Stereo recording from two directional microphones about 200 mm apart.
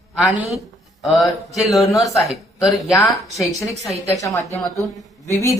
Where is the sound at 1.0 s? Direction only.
Centre (ahead or behind).